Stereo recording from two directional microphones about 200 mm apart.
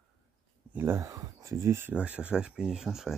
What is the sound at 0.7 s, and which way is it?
Speech, 10° right (ahead or behind).